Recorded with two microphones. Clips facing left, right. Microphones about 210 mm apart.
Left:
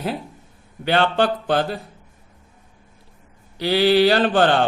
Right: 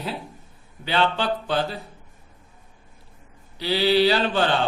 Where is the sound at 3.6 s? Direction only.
50° left (ahead or behind).